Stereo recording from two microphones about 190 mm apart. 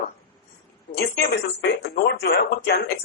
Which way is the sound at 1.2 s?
60° left (ahead or behind).